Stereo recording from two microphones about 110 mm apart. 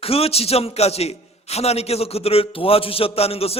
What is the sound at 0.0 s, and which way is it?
A man's voice, 65° left (ahead or behind).